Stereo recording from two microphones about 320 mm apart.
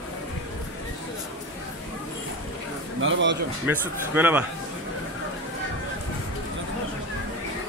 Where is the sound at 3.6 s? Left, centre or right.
Centre.